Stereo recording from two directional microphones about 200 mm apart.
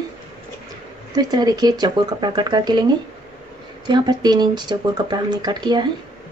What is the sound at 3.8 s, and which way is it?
Speech, 20° right (ahead or behind).